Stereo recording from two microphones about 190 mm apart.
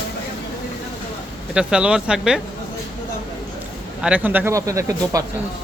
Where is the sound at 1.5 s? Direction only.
5° right (ahead or behind).